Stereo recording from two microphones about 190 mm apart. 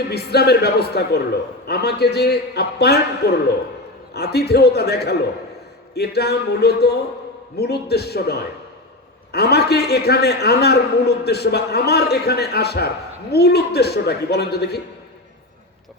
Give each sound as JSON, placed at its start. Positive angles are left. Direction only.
{"t": 0.1, "sound": "a man's voice", "side_deg": 55}